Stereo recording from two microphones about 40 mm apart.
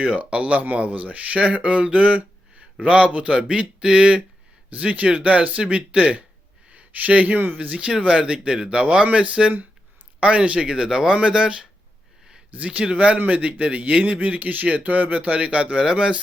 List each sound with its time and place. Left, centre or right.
0.2 s a man's voice: right
5.9 s speech: centre
6.7 s a sound: right
7.3 s a man's voice: right
7.7 s a man's voice: right
10.7 s a man's voice: centre
12.5 s speech: right
13.1 s a man's voice: right
13.4 s a man's voice: right
15.3 s a man's voice: right